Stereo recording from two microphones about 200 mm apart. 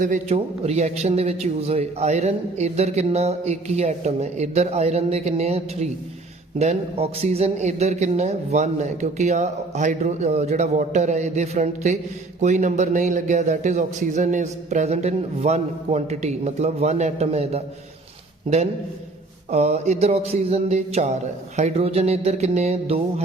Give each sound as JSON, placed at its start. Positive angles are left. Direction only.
{"t": 0.0, "sound": "a man's voice", "side_deg": -35}
{"t": 19.5, "sound": "a man's voice", "side_deg": -30}